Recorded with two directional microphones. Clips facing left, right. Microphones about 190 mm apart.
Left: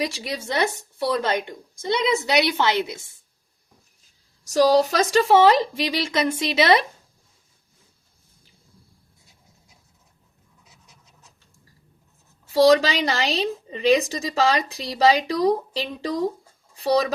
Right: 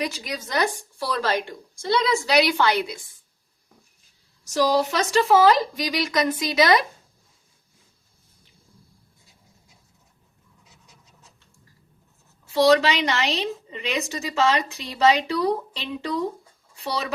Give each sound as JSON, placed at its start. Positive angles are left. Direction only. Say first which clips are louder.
{"t": 0.0, "sound": "a woman's voice", "louder": "left 2 dB", "side_deg": 30}
{"t": 4.4, "sound": "a woman's voice", "louder": "left 4 dB", "side_deg": 40}
{"t": 12.6, "sound": "a woman's voice", "louder": "left 1 dB", "side_deg": 35}